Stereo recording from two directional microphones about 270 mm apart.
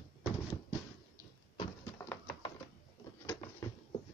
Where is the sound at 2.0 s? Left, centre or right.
Centre.